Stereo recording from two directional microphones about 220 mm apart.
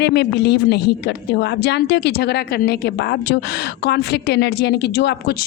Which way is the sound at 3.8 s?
50° left (ahead or behind).